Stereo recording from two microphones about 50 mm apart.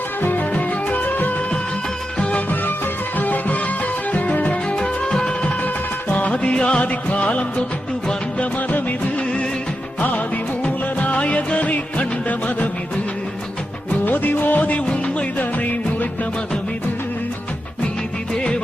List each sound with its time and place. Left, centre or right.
0.2 s music: left
0.5 s music: left
3.2 s music: left; by 5.3 s centre
6.1 s music: left
10.6 s music of bollywood: left
14.0 s music: left